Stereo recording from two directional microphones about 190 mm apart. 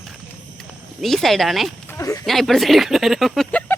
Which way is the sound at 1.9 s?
15° left (ahead or behind).